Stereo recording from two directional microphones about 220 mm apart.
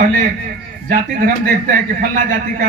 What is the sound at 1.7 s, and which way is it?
Speech, 35° right (ahead or behind).